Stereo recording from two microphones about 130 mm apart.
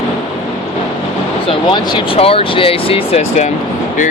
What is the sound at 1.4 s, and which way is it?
Speech, 45° left (ahead or behind).